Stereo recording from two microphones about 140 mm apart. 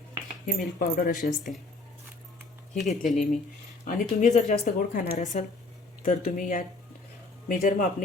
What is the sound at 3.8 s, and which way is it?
Speech, 60° left (ahead or behind).